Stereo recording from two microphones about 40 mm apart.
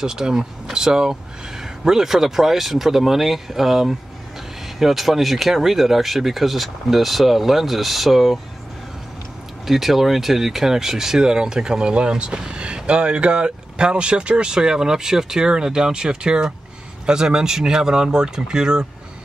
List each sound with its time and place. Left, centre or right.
0.0 s speech: centre
9.7 s speech: centre